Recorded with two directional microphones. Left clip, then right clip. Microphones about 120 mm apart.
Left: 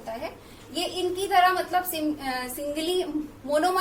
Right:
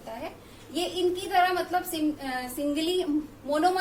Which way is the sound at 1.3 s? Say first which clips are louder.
Left 5 dB; 20° right (ahead or behind).